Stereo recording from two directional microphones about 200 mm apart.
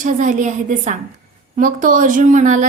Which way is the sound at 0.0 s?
40° right (ahead or behind).